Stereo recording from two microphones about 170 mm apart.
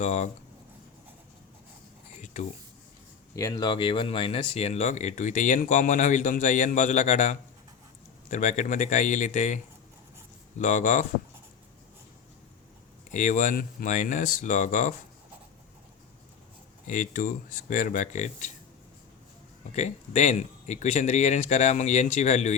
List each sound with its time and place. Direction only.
0.0 s speech: 45° left (ahead or behind)
2.2 s a sound: 45° left (ahead or behind)
3.3 s speech: 20° left (ahead or behind); by 9.6 s 45° left (ahead or behind)
10.6 s speech: 50° left (ahead or behind)
13.1 s speech: 45° left (ahead or behind)
16.8 s speech: 50° left (ahead or behind)
19.7 s speech: 45° left (ahead or behind)